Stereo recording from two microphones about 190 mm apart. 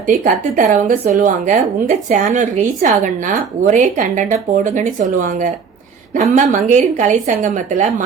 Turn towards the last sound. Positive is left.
turn(degrees=-40)  # may be behind; listen again after turning